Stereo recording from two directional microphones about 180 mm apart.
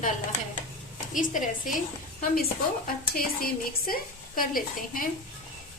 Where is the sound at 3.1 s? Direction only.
55° left (ahead or behind).